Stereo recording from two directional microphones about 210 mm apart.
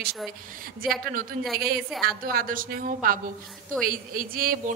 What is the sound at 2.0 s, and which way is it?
A woman's voice, 45° right (ahead or behind).